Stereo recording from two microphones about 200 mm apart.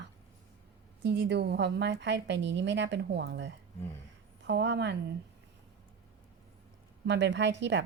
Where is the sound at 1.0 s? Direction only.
55° right (ahead or behind).